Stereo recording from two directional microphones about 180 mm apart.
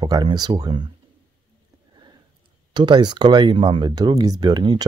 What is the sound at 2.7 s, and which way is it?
Speech, 25° right (ahead or behind).